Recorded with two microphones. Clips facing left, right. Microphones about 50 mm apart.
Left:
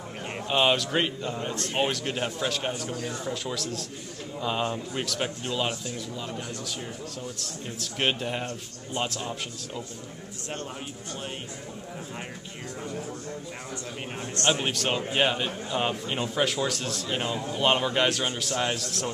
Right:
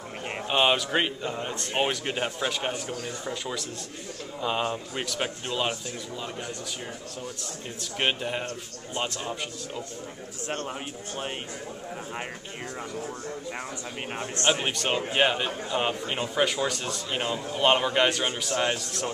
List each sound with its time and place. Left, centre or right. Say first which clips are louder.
0.3 s a man's voice: even; centre
7.3 s a man's voice: left 1 dB; centre
14.1 s a man's voice: right 1 dB; right
14.6 s a man's voice: even; centre